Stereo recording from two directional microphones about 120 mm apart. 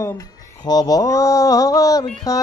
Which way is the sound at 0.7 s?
30° left (ahead or behind).